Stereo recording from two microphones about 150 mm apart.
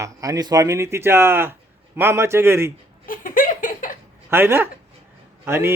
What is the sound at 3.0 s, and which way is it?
Laughter, 65° left (ahead or behind).